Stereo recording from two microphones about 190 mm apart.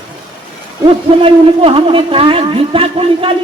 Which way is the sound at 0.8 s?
30° right (ahead or behind).